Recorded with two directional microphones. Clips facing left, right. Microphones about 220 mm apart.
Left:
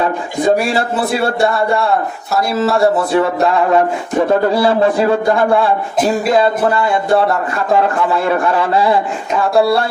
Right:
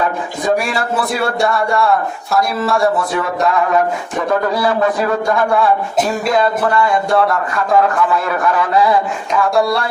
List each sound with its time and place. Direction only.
0.7 s speech: 30° left (ahead or behind)